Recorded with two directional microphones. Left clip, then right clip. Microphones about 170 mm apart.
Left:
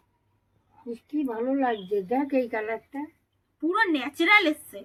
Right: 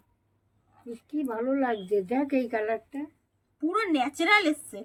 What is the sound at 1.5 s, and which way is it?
Speech, 15° right (ahead or behind).